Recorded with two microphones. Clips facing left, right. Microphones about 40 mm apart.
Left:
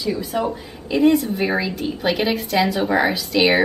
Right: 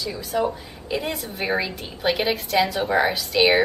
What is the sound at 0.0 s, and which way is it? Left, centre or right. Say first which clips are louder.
Speech: left 2 dB; centre.